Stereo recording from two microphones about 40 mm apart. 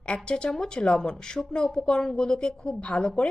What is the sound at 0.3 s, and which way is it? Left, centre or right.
A woman's voice, left.